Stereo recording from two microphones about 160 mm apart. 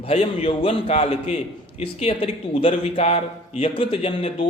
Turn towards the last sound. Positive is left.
turn(degrees=35)  # may be behind; listen again after turning